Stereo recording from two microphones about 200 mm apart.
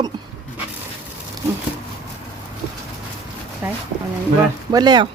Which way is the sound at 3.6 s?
10° right (ahead or behind).